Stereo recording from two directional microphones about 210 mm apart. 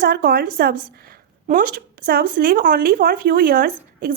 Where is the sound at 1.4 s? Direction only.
40° right (ahead or behind).